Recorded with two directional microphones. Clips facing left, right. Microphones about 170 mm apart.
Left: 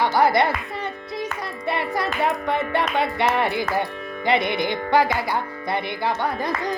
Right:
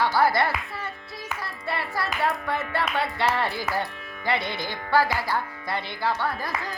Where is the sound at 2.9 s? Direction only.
15° left (ahead or behind).